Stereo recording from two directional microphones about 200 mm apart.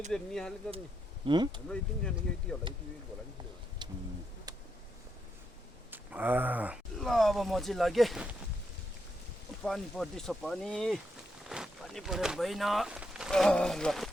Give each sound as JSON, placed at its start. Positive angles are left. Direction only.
{"t": 0.1, "sound": "speech", "side_deg": 5}
{"t": 1.3, "sound": "speech", "side_deg": -25}
{"t": 1.7, "sound": "speech", "side_deg": 5}
{"t": 3.8, "sound": "bird", "side_deg": -20}
{"t": 5.9, "sound": "speech", "side_deg": -10}
{"t": 9.6, "sound": "speech", "side_deg": 0}